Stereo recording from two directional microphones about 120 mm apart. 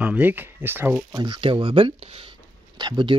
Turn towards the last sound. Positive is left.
turn(degrees=-40)  # may be behind; listen again after turning